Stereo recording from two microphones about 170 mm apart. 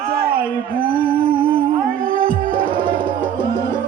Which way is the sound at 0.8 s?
55° right (ahead or behind).